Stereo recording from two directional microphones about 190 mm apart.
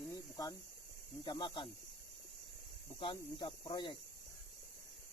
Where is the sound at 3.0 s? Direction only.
25° left (ahead or behind).